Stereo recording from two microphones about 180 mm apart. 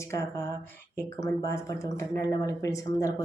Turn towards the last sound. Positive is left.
turn(degrees=15)  # may be behind; listen again after turning